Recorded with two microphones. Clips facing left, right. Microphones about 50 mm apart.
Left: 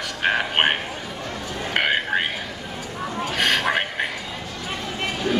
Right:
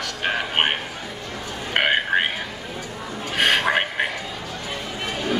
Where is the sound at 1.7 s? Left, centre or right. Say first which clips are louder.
Right 2 dB; centre.